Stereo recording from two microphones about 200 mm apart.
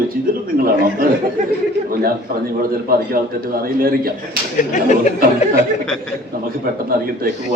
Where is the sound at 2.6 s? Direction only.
45° right (ahead or behind).